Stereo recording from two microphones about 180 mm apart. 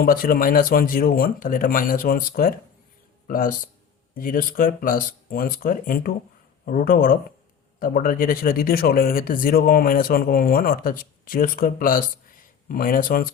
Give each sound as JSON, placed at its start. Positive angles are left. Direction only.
{"t": 0.0, "sound": "speech", "side_deg": 55}